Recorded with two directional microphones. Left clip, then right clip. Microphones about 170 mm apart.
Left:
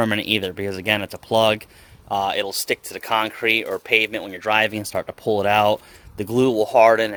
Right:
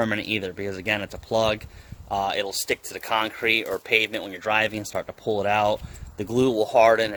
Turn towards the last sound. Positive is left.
turn(degrees=40)  # may be behind; listen again after turning